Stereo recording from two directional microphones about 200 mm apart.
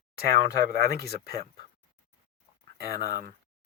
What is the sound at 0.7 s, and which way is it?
Speech, 50° right (ahead or behind).